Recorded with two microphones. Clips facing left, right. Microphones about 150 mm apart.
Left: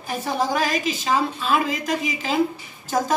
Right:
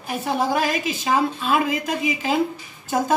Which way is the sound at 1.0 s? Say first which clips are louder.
Right 3 dB; 15° right (ahead or behind).